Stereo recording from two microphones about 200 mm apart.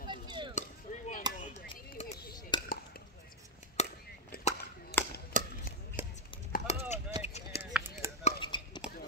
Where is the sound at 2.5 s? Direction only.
20° left (ahead or behind).